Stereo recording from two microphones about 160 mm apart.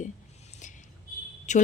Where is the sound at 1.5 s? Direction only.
50° left (ahead or behind).